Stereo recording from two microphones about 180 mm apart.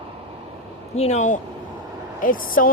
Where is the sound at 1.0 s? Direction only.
40° left (ahead or behind).